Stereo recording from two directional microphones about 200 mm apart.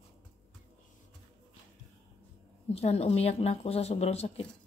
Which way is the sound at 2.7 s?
30° left (ahead or behind).